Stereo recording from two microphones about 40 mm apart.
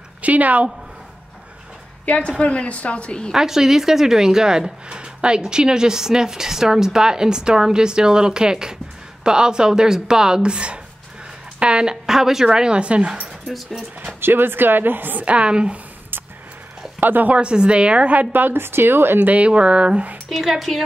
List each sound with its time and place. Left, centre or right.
0.2 s a woman's voice: right
2.0 s a woman's voice: left
3.3 s a woman's voice: centre
12.1 s a woman's voice: centre
12.4 s speech: right
13.5 s speech: centre
14.2 s a woman's voice: right
15.2 s speech: right
17.0 s a woman's voice: right
17.3 s speech: right
18.3 s a woman's voice: right
19.2 s speech: right
20.2 s speech: centre